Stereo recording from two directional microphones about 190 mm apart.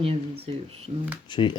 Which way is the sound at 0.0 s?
30° right (ahead or behind).